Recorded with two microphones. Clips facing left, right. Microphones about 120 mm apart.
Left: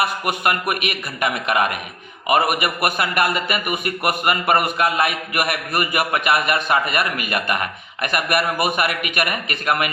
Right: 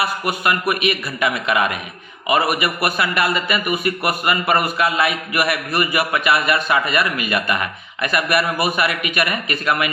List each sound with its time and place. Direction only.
0.0 s a man's voice: 50° left (ahead or behind)